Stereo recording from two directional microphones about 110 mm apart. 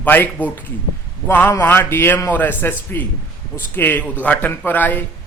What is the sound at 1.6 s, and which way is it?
A man's voice, 20° left (ahead or behind).